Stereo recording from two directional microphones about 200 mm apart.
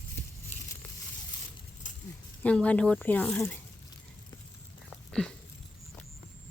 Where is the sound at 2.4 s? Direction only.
5° left (ahead or behind).